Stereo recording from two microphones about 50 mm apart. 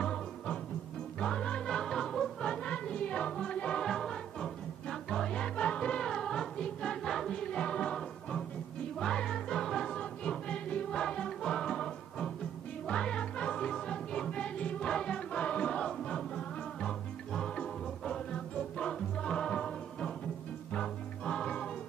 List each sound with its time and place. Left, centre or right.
0.0 s music: centre
3.8 s music: centre
9.9 s music: centre